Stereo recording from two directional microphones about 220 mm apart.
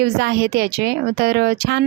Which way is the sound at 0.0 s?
50° right (ahead or behind).